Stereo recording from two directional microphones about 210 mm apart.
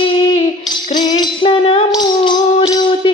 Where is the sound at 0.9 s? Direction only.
20° left (ahead or behind).